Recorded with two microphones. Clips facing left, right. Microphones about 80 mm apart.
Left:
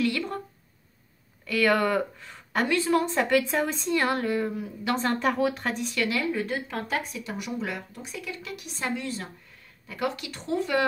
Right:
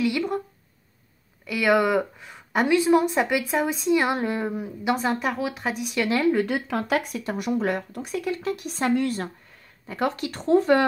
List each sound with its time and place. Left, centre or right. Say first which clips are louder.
0.0 s speech: right 3 dB; centre
1.4 s a woman's voice: right 2 dB; centre
5.9 s speech: right 5 dB; right
6.4 s speech: right 5 dB; right
9.8 s speech: right 4 dB; right